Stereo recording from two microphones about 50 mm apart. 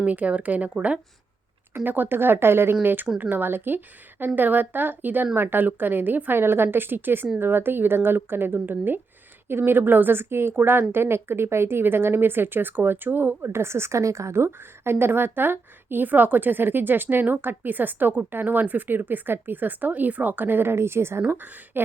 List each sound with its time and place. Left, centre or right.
0.0 s speech: right
1.7 s a woman's voice: right
2.8 s a woman's voice: right
13.4 s a woman's voice: right
21.4 s speech: right